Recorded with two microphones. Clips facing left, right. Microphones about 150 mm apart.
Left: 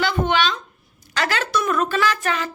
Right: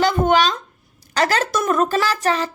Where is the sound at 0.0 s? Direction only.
45° right (ahead or behind).